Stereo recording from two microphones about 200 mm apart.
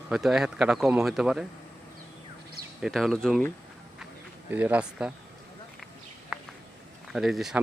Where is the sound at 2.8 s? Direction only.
Centre (ahead or behind).